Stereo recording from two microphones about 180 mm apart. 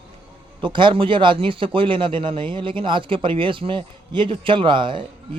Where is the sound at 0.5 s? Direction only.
25° right (ahead or behind).